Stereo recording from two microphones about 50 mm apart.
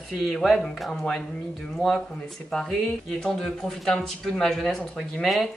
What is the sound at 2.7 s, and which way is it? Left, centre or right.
Speech, centre.